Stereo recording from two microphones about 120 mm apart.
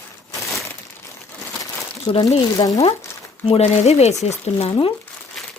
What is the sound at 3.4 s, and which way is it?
Speech, 60° left (ahead or behind).